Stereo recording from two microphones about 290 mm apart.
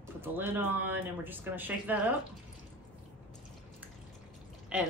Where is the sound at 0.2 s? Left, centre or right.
Centre.